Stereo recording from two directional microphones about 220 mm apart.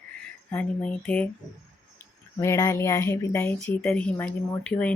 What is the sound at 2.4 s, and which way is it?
Speech, 15° left (ahead or behind).